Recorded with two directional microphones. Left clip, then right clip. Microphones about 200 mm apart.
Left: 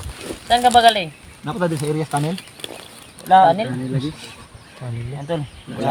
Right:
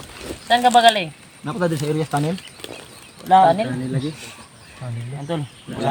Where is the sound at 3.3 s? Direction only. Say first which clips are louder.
Left 1 dB; 10° left (ahead or behind).